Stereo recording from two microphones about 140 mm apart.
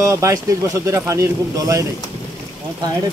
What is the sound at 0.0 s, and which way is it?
Speech, 20° right (ahead or behind).